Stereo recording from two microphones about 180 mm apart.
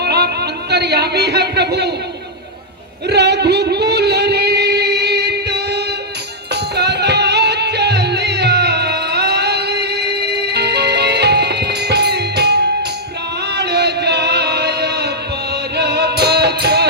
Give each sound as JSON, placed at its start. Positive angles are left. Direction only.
{"t": 0.0, "sound": "music", "side_deg": -65}
{"t": 3.1, "sound": "singing", "side_deg": -70}
{"t": 6.5, "sound": "music", "side_deg": -65}